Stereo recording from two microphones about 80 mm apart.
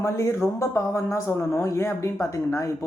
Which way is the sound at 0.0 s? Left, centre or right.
Left.